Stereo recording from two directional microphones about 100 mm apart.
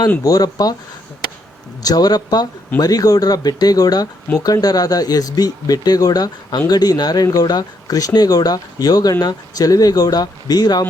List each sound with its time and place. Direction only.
0.3 s speech: 40° left (ahead or behind)
1.8 s speech: 40° left (ahead or behind)